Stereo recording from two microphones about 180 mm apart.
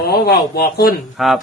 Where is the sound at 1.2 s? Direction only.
Centre (ahead or behind).